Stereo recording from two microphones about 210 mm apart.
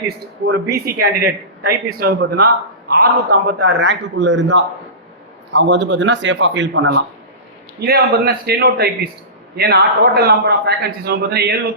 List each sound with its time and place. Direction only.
0.4 s a man's voice: 50° right (ahead or behind)
7.8 s a man's voice: 50° right (ahead or behind)